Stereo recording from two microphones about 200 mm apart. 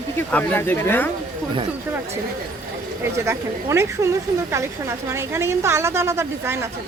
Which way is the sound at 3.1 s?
15° right (ahead or behind).